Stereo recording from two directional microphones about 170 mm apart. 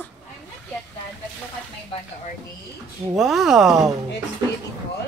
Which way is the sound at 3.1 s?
Centre (ahead or behind).